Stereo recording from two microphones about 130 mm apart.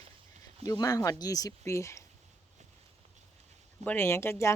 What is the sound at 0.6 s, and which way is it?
Speech, 30° left (ahead or behind).